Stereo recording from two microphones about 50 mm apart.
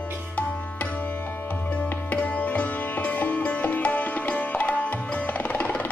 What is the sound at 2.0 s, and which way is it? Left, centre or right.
Sitar, left.